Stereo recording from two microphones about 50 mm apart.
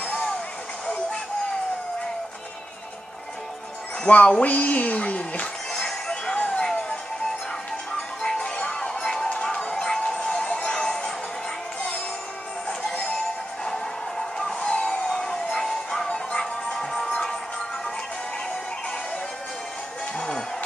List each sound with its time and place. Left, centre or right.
0.0 s a sound: centre
4.0 s speech: left
5.7 s music: centre
8.2 s music: centre
12.6 s music: centre
14.4 s music: centre
14.8 s a sound: centre
15.5 s music: centre
20.2 s music: centre